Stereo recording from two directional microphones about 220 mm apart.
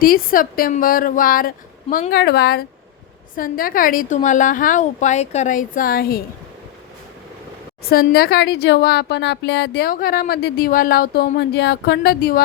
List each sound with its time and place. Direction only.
0.0 s a woman's voice: 40° left (ahead or behind)
7.9 s speech: 45° left (ahead or behind)